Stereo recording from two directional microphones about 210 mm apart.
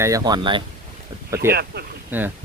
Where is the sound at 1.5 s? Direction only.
50° right (ahead or behind).